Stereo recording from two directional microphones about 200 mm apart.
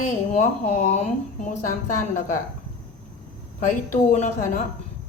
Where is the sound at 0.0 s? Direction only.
35° left (ahead or behind).